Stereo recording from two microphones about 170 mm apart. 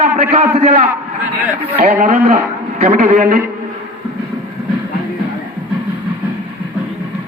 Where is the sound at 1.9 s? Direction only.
45° right (ahead or behind).